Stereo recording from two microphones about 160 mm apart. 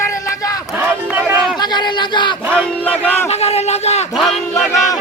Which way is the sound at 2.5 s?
10° left (ahead or behind).